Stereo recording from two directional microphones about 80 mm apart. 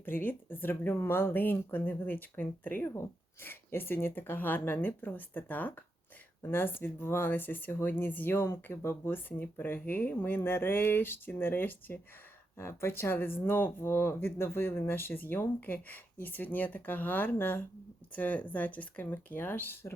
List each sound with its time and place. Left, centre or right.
0.0 s speech: left